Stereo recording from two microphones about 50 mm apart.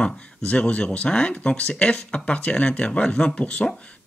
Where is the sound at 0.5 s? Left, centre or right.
Left.